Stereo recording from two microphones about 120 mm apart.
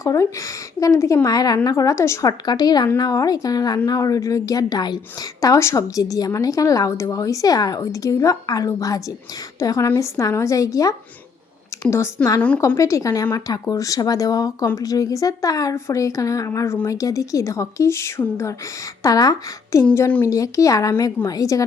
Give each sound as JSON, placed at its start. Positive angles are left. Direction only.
{"t": 0.0, "sound": "a woman's voice", "side_deg": 25}
{"t": 12.4, "sound": "a woman's voice", "side_deg": 10}
{"t": 12.6, "sound": "a woman's voice", "side_deg": 25}
{"t": 19.9, "sound": "a woman's voice", "side_deg": 15}
{"t": 20.2, "sound": "a woman's voice", "side_deg": 25}